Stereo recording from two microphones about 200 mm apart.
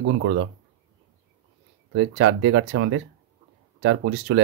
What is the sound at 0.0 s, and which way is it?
Speech, 80° right.